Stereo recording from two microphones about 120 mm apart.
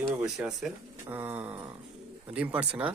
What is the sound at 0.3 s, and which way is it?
Speech, centre (ahead or behind).